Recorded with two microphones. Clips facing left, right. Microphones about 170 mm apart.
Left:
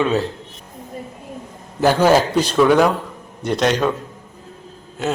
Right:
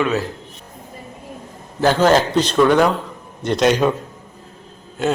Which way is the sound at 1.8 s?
10° left (ahead or behind).